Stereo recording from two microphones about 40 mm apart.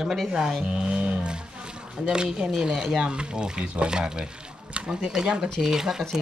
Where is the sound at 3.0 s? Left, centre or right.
Right.